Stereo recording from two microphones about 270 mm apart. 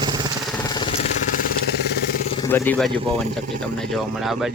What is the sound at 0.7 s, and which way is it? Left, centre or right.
Vehicle, centre.